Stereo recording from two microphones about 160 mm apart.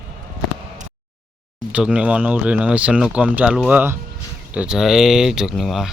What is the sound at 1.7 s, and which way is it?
Speech, 5° right (ahead or behind).